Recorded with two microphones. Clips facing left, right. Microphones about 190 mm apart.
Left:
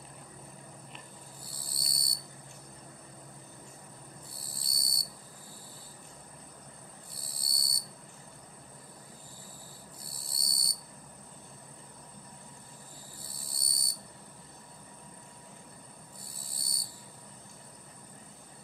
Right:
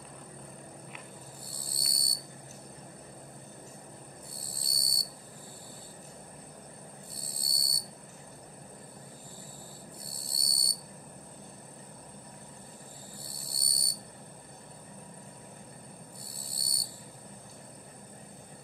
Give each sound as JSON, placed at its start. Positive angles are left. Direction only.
{"t": 1.6, "sound": "owl", "side_deg": -55}
{"t": 4.5, "sound": "cricket", "side_deg": -55}
{"t": 7.3, "sound": "cricket", "side_deg": -55}
{"t": 10.2, "sound": "a sound", "side_deg": -60}
{"t": 13.4, "sound": "owl", "side_deg": -65}
{"t": 16.4, "sound": "cricket", "side_deg": -65}